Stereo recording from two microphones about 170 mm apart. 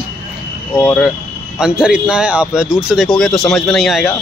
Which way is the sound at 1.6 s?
5° right (ahead or behind).